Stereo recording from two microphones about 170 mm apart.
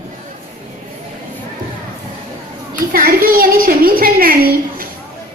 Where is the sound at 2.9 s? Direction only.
60° right (ahead or behind).